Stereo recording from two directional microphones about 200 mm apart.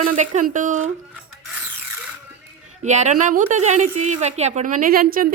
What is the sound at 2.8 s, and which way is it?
A woman's voice, 35° right (ahead or behind).